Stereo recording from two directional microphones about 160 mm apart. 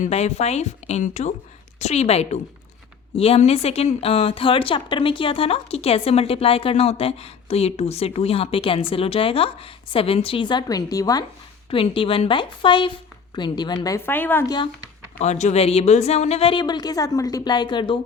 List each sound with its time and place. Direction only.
0.0 s a woman's voice: 45° left (ahead or behind); by 11.3 s 25° left (ahead or behind)
11.7 s a woman's voice: 35° left (ahead or behind); by 14.5 s 15° left (ahead or behind)
15.2 s a woman's voice: 45° left (ahead or behind); by 18.0 s 30° left (ahead or behind)